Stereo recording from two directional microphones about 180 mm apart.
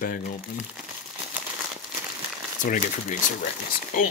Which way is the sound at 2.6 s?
45° left (ahead or behind).